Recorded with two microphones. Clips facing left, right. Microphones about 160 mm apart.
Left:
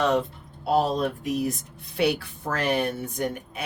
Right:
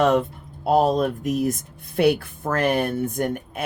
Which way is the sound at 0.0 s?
50° right (ahead or behind).